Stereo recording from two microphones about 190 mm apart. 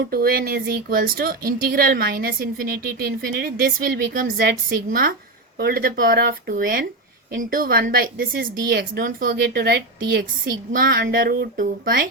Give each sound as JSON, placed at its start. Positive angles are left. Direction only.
{"t": 0.0, "sound": "a woman's voice", "side_deg": -50}